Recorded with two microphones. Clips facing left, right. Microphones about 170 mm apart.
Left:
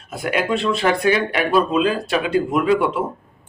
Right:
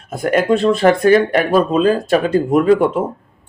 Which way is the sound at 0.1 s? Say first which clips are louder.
Right 6 dB; 45° right (ahead or behind).